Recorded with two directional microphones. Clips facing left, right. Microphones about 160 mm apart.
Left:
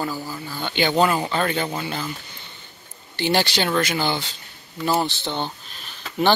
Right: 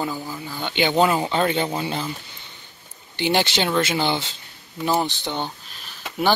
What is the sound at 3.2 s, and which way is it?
Speech, 15° right (ahead or behind).